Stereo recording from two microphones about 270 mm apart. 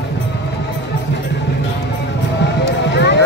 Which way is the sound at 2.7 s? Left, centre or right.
Left.